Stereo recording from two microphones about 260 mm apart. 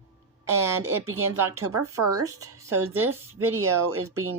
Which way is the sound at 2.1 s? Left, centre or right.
Right.